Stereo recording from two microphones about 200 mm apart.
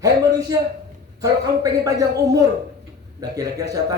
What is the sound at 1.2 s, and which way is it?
Speech, 15° right (ahead or behind).